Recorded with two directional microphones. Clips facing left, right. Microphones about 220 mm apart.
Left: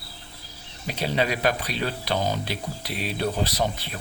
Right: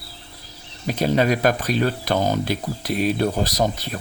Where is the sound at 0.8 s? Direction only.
45° right (ahead or behind).